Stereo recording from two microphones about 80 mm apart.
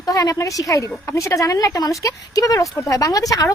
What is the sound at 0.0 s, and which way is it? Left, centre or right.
A woman's voice, left.